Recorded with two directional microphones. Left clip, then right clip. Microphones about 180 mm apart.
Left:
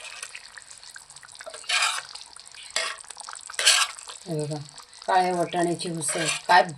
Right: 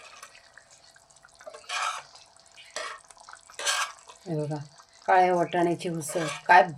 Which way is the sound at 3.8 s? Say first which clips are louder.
Left 5 dB; 10° left (ahead or behind).